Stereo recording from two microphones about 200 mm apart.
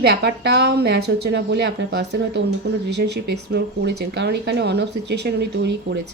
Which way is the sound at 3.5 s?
60° right (ahead or behind).